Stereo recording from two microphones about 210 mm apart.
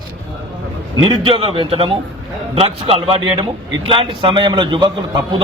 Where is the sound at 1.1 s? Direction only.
25° right (ahead or behind).